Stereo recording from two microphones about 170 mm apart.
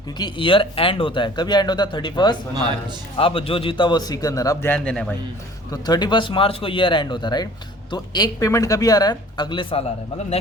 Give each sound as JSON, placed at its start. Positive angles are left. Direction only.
{"t": 0.2, "sound": "speech", "side_deg": 30}
{"t": 5.7, "sound": "speech", "side_deg": 25}